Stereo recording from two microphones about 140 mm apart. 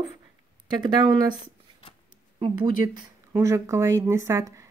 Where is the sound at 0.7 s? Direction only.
30° right (ahead or behind).